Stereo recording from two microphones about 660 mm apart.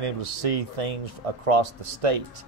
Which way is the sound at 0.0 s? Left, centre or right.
Right.